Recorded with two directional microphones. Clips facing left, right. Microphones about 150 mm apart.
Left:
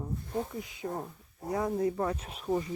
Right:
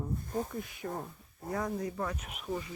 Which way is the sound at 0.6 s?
20° left (ahead or behind).